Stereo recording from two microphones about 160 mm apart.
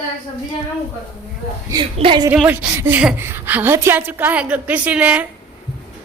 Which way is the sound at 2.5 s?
10° right (ahead or behind).